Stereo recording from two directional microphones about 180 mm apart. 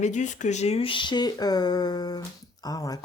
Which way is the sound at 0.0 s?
45° left (ahead or behind).